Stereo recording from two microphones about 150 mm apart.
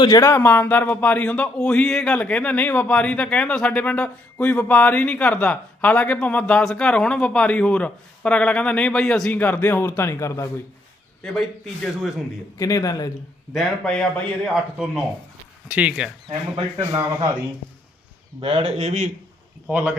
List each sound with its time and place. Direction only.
0.0 s speech: 20° left (ahead or behind)
11.2 s a man's voice: 5° left (ahead or behind)
12.5 s a man's voice: 20° left (ahead or behind)
13.5 s a man's voice: centre (ahead or behind)
16.6 s a man's voice: 30° right (ahead or behind)
18.3 s speech: 40° right (ahead or behind)
19.6 s a man's voice: 10° right (ahead or behind)